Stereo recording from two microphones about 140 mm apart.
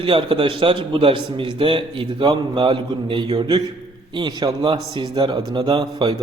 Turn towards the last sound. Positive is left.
turn(degrees=-35)  # may be behind; listen again after turning